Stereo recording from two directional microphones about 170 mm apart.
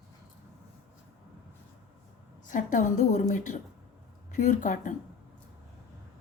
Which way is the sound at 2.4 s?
50° left (ahead or behind).